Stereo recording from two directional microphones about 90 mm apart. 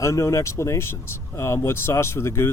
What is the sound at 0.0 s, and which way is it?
Speech, 35° left (ahead or behind).